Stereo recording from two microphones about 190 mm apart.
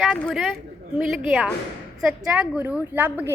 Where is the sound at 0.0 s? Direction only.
Centre (ahead or behind).